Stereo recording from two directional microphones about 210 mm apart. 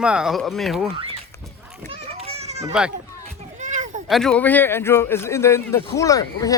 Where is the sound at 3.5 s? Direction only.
35° right (ahead or behind).